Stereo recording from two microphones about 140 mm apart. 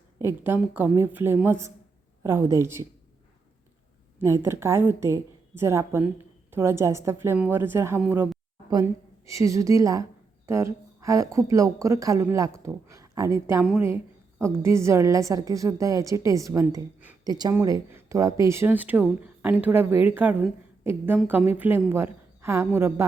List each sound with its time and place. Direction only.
0.2 s a woman's voice: 15° right (ahead or behind)
4.2 s a woman's voice: 20° right (ahead or behind)
13.6 s a woman's voice: 10° right (ahead or behind)